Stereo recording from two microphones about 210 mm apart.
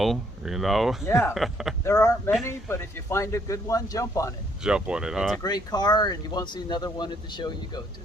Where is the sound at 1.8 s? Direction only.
10° left (ahead or behind).